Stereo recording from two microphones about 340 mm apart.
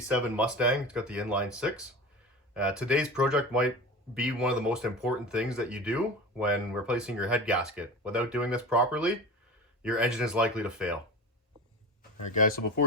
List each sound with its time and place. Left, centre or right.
0.1 s speech: centre
12.3 s speech: left